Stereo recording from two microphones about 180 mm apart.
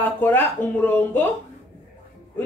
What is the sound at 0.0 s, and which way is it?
Speech, 10° left (ahead or behind).